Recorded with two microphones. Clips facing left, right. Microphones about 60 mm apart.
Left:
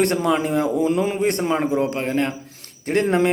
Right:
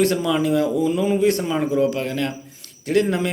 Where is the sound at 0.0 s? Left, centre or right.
Left.